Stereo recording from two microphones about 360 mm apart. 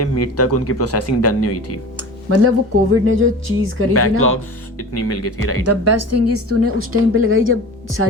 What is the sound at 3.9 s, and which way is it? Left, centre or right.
Speech, left.